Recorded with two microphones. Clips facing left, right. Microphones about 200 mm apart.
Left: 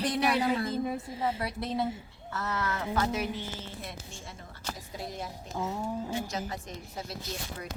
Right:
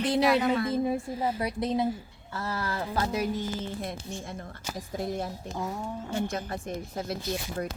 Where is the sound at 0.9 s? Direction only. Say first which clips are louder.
Right 3 dB; 25° right (ahead or behind); by 3.8 s 40° right (ahead or behind).